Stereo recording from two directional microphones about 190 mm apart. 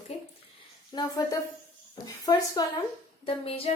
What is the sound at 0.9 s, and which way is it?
A woman's voice, 20° left (ahead or behind).